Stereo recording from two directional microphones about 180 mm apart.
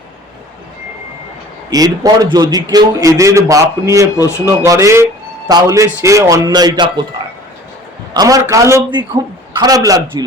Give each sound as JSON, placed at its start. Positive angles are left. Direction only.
{"t": 1.7, "sound": "a man's voice", "side_deg": -20}
{"t": 4.2, "sound": "speech", "side_deg": 15}
{"t": 4.4, "sound": "a man's voice", "side_deg": -15}
{"t": 8.1, "sound": "a man's voice", "side_deg": -20}